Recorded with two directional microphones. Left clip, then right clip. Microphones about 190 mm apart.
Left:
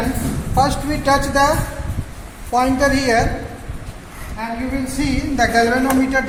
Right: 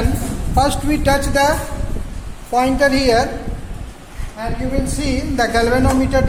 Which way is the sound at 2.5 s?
25° right (ahead or behind).